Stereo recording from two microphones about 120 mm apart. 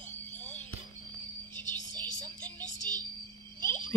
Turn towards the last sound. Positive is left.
turn(degrees=20)  # may be behind; listen again after turning